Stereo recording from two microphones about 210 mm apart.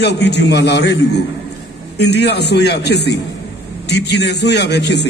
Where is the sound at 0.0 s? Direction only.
55° left (ahead or behind).